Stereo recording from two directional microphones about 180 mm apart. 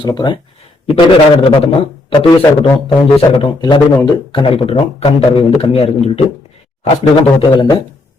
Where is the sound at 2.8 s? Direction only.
25° left (ahead or behind).